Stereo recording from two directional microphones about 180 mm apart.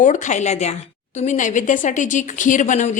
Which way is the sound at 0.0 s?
45° left (ahead or behind).